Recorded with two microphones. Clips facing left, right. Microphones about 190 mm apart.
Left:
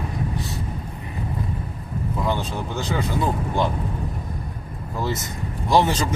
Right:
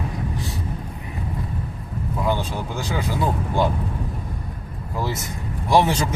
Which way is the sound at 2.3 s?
10° right (ahead or behind).